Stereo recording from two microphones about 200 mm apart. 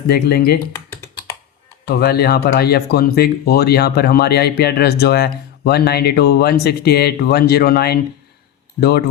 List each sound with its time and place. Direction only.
0.1 s speech: 50° left (ahead or behind)
0.7 s computer keyboard: 20° left (ahead or behind)
1.8 s speech: 50° left (ahead or behind)